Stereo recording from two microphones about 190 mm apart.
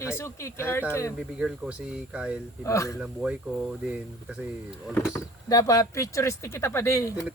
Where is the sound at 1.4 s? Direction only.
5° right (ahead or behind).